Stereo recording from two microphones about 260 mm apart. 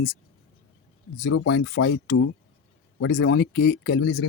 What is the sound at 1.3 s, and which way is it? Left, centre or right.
Speech, left.